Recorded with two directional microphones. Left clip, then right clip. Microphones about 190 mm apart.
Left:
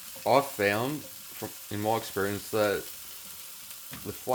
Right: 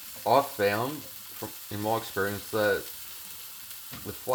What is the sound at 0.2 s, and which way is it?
Speech, 30° left (ahead or behind).